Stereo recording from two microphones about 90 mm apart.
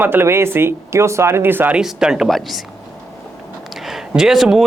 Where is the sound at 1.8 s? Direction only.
5° right (ahead or behind).